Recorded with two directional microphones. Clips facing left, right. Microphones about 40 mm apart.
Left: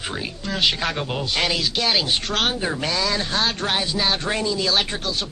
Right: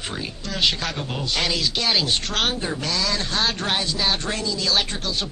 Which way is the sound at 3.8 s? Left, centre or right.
Centre.